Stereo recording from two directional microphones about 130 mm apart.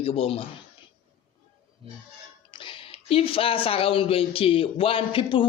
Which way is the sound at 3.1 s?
45° left (ahead or behind).